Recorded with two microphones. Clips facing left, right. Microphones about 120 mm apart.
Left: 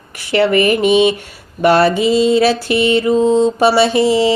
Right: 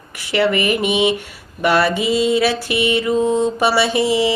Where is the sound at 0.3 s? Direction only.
30° left (ahead or behind).